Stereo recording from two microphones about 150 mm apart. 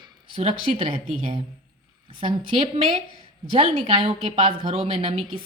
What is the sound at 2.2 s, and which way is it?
A woman's voice, 35° right (ahead or behind).